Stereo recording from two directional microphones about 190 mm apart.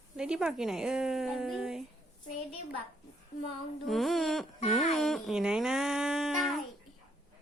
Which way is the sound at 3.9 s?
Centre (ahead or behind).